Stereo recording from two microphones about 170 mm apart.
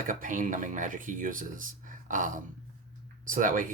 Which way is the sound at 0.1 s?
50° right (ahead or behind).